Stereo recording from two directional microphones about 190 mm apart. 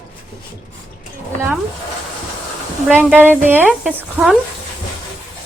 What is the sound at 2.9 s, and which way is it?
A woman's voice, 10° right (ahead or behind).